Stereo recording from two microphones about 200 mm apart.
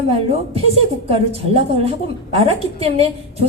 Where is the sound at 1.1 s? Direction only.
30° right (ahead or behind).